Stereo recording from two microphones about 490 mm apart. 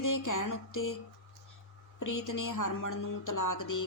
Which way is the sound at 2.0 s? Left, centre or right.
Left.